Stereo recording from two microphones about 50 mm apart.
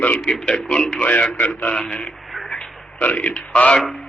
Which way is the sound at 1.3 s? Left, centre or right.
Left.